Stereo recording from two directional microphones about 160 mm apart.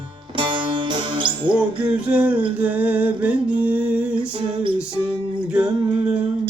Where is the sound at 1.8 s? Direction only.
5° right (ahead or behind).